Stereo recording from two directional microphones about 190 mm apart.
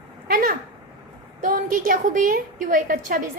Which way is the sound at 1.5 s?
45° right (ahead or behind).